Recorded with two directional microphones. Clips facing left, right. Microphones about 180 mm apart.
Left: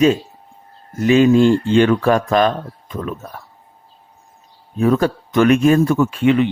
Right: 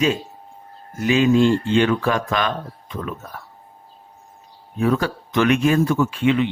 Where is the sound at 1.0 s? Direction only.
45° left (ahead or behind).